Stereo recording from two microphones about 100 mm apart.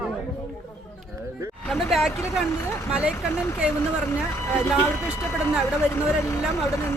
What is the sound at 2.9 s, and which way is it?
Speech, 10° right (ahead or behind).